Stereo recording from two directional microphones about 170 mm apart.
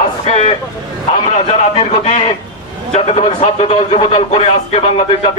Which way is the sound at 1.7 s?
40° left (ahead or behind).